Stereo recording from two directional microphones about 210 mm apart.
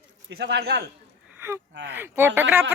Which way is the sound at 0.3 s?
55° right (ahead or behind).